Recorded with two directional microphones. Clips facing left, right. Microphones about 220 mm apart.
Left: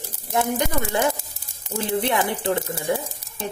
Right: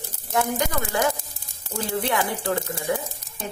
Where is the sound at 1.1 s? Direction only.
10° left (ahead or behind).